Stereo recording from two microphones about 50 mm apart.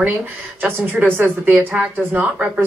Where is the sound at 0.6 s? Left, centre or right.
Right.